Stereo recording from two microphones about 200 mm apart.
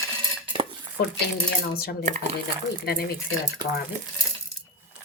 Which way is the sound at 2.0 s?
40° right (ahead or behind).